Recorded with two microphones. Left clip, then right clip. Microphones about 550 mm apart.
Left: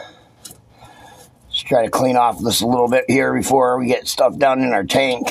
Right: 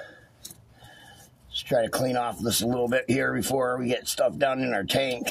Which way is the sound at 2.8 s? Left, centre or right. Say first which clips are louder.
Left 9 dB; right.